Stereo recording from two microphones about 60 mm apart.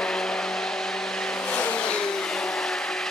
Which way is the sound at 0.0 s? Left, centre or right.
Centre.